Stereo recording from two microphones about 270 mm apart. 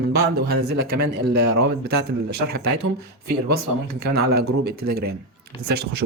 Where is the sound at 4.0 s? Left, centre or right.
Right.